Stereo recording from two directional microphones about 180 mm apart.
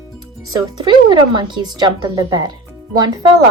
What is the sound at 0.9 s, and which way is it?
Speech, 25° right (ahead or behind).